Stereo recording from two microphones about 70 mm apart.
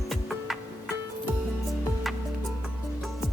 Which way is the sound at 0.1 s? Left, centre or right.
Centre.